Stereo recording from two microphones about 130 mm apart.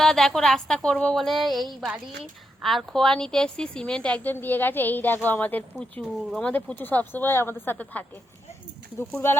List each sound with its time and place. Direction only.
0.0 s speech: 5° left (ahead or behind)
5.7 s speech: centre (ahead or behind)
9.1 s speech: 15° left (ahead or behind)